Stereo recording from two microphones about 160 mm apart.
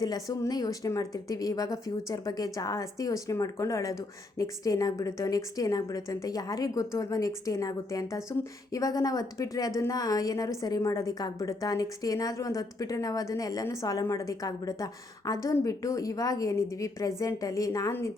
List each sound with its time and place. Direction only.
0.0 s speech: 25° left (ahead or behind)